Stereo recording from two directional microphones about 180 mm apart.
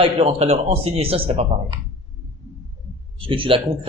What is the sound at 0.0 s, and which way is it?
Speech, 35° right (ahead or behind).